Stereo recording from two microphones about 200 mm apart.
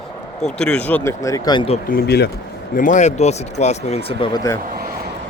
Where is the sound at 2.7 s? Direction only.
40° left (ahead or behind); by 4.6 s 20° left (ahead or behind).